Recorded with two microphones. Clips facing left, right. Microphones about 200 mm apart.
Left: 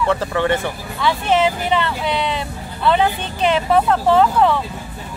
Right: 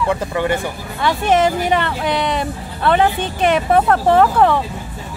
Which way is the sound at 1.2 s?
50° right (ahead or behind).